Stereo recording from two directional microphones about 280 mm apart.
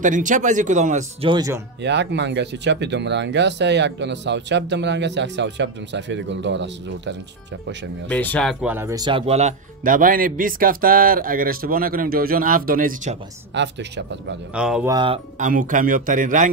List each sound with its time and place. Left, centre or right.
0.0 s speech: right
1.8 s speech: right
8.1 s speech: centre; by 13.2 s right
13.6 s speech: right
14.5 s speech: centre
15.0 s speech: right